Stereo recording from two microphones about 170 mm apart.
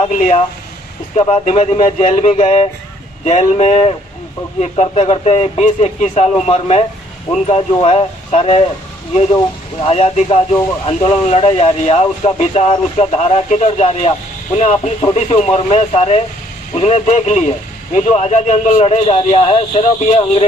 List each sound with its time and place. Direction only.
0.2 s speech: 35° left (ahead or behind)
9.8 s speech: 35° left (ahead or behind)